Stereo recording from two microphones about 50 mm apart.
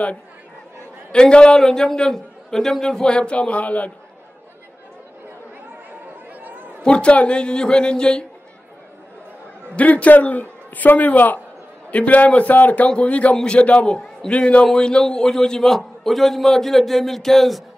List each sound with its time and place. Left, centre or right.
1.1 s a man's voice: centre
6.8 s a man's voice: centre
9.8 s a man's voice: left; by 17.6 s centre